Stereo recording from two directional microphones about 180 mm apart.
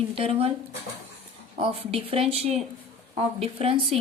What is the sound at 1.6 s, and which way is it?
A woman's voice, 35° right (ahead or behind).